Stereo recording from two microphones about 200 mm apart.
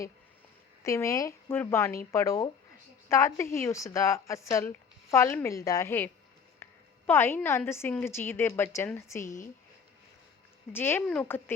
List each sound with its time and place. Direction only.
0.9 s speech: 15° left (ahead or behind)
6.6 s a sound: 10° left (ahead or behind)
7.1 s speech: 10° left (ahead or behind)
9.2 s speech: 40° left (ahead or behind)
10.7 s speech: 10° left (ahead or behind)